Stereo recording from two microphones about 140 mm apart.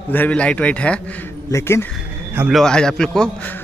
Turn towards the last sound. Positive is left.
turn(degrees=10)  # may be behind; listen again after turning